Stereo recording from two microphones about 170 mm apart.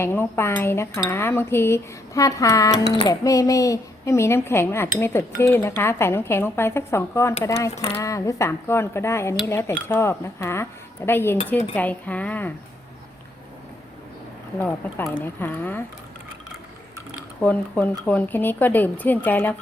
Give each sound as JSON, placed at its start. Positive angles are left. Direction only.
{"t": 0.0, "sound": "speech", "side_deg": 15}
{"t": 14.6, "sound": "speech", "side_deg": 10}
{"t": 17.4, "sound": "speech", "side_deg": 10}